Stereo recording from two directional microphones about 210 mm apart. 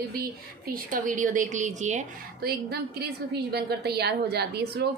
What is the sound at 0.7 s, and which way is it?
A woman's voice, 40° right (ahead or behind).